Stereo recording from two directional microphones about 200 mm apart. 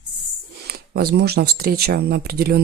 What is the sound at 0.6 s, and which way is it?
Speech, 50° right (ahead or behind).